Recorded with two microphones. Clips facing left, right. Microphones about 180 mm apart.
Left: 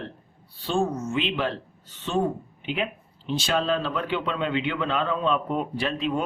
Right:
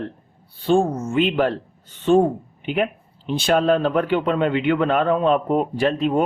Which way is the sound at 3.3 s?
55° right (ahead or behind).